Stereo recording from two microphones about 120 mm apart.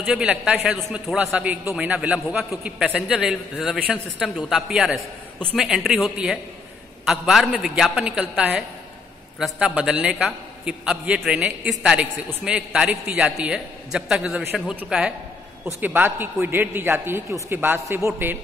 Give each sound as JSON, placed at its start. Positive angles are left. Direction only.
{"t": 0.0, "sound": "a man's voice", "side_deg": -10}
{"t": 0.7, "sound": "a man's voice", "side_deg": 0}
{"t": 1.1, "sound": "a man's voice", "side_deg": -10}